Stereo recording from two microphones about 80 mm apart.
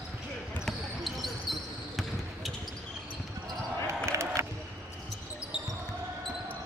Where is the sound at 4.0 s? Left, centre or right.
Right.